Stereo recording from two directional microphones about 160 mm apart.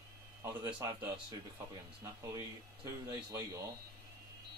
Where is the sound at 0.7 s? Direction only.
25° right (ahead or behind).